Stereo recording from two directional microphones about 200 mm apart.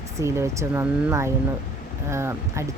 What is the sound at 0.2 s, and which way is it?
Speech, 15° right (ahead or behind).